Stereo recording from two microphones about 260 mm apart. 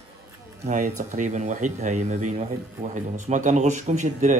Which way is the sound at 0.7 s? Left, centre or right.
Right.